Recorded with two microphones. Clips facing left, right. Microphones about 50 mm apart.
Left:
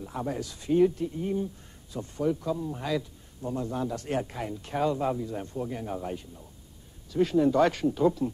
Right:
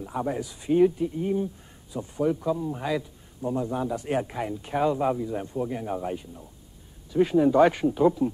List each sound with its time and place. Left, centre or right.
0.0 s speech: centre